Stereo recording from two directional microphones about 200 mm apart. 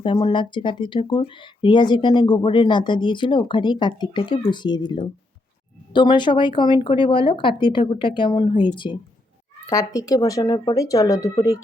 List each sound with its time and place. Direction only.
0.0 s speech: 25° left (ahead or behind)